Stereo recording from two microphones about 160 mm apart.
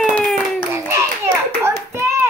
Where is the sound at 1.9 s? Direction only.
15° right (ahead or behind).